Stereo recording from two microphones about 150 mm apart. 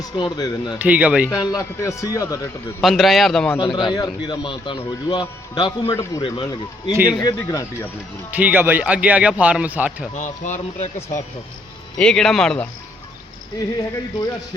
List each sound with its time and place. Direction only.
0.2 s speech: 25° left (ahead or behind)
0.8 s a man's voice: 10° right (ahead or behind)
1.3 s speech: 25° left (ahead or behind)
2.8 s a man's voice: centre (ahead or behind)
3.6 s a man's voice: 30° left (ahead or behind)
5.9 s speech: 20° left (ahead or behind)
6.2 s a man's voice: 30° left (ahead or behind)
8.3 s a man's voice: 10° right (ahead or behind)
10.2 s speech: 55° left (ahead or behind)
11.9 s a man's voice: 5° left (ahead or behind)